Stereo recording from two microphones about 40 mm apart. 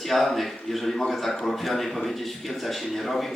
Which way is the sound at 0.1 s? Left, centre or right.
Centre.